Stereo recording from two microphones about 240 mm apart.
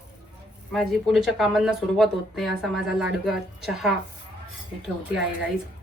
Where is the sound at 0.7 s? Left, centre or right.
Centre.